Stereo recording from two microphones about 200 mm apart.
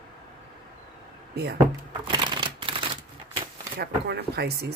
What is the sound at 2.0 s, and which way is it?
Typewriter, 25° right (ahead or behind).